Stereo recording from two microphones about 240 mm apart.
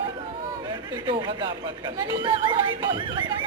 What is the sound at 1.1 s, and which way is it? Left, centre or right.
Speech, centre.